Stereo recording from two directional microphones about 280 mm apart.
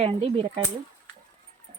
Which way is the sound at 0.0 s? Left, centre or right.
Centre.